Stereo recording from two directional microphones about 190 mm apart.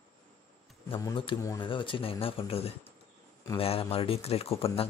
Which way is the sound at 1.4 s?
25° left (ahead or behind).